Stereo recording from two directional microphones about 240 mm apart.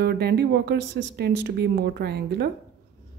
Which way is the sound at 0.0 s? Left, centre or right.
Right.